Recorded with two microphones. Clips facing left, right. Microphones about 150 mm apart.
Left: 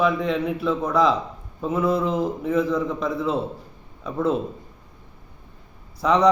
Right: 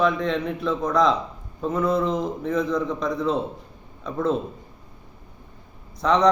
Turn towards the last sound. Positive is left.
turn(degrees=5)  # may be behind; listen again after turning